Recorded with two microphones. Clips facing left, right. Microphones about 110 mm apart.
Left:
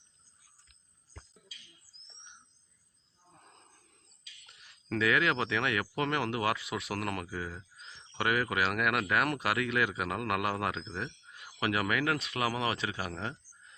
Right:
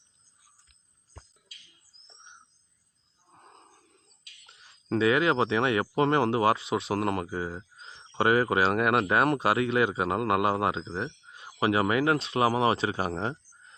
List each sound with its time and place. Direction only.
4.4 s speech: 30° right (ahead or behind)